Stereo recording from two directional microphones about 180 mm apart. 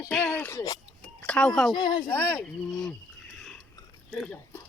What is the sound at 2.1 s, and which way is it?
Speech, 10° left (ahead or behind).